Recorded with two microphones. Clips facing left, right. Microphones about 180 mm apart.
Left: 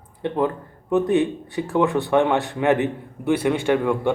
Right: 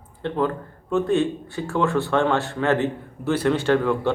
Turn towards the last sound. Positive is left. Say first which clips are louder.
# even
turn(degrees=15)  # may be behind; listen again after turning